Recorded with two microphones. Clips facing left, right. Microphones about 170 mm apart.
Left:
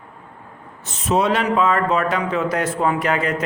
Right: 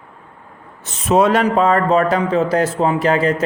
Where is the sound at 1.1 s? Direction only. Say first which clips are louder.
Right 5 dB; 45° right (ahead or behind).